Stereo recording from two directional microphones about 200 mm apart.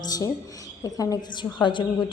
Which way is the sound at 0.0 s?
20° left (ahead or behind).